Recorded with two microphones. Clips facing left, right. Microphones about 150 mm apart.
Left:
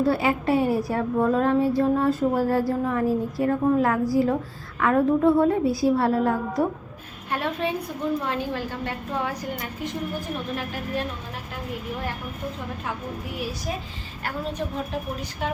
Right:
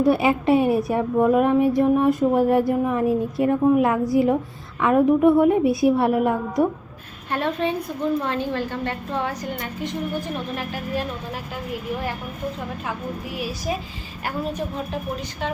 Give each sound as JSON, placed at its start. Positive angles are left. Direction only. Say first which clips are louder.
{"t": 0.0, "sound": "a sound", "louder": "right 4 dB", "side_deg": -20}
{"t": 7.3, "sound": "a woman's voice", "louder": "right 3 dB", "side_deg": 5}
{"t": 13.3, "sound": "a woman's voice", "louder": "right 4 dB", "side_deg": -5}